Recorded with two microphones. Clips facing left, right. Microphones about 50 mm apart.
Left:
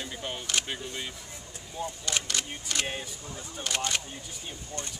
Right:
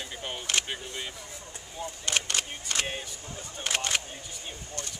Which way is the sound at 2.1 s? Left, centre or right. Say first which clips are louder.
Right 4 dB; right.